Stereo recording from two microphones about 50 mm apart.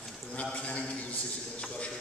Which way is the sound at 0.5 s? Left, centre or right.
Left.